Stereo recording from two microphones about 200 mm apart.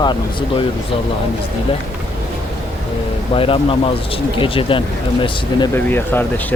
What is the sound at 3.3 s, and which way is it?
Speech, 25° left (ahead or behind).